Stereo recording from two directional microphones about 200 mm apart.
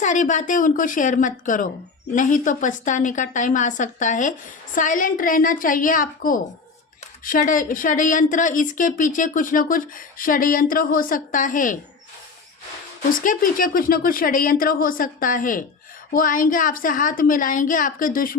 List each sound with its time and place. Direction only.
0.0 s a woman's voice: 40° left (ahead or behind)
13.1 s a woman's voice: 45° left (ahead or behind)